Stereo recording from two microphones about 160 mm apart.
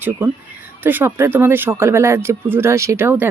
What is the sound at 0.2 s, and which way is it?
Speech, 10° right (ahead or behind).